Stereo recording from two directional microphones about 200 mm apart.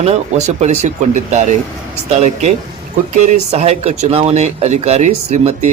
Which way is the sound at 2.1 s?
35° right (ahead or behind).